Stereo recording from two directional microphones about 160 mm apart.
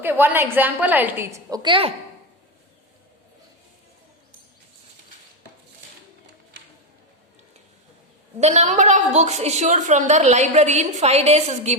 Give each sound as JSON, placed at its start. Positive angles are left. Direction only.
{"t": 0.0, "sound": "a woman's voice", "side_deg": -15}
{"t": 8.4, "sound": "a woman's voice", "side_deg": -45}